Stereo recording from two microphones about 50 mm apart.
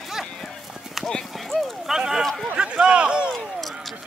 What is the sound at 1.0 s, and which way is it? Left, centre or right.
Clip-clop, centre.